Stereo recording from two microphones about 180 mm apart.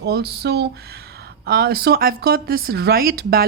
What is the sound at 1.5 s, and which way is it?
Speech, 60° right (ahead or behind).